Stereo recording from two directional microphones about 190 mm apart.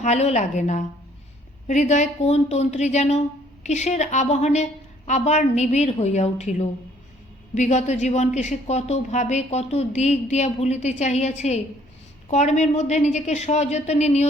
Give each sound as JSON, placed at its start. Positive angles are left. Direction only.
{"t": 0.0, "sound": "speech", "side_deg": 35}